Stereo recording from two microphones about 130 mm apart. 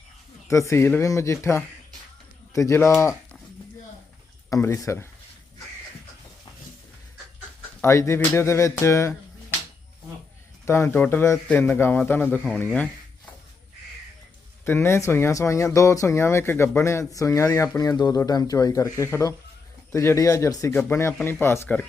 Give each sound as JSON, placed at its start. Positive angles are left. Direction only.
{"t": 0.4, "sound": "speech", "side_deg": 25}
{"t": 4.4, "sound": "speech", "side_deg": 25}
{"t": 7.8, "sound": "speech", "side_deg": 20}
{"t": 10.7, "sound": "a man's voice", "side_deg": 20}
{"t": 14.6, "sound": "speech", "side_deg": 20}